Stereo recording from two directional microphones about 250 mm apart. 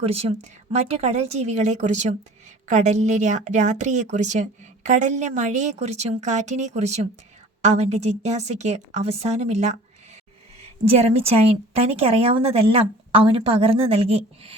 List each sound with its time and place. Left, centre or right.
0.0 s speech: right
10.9 s speech: right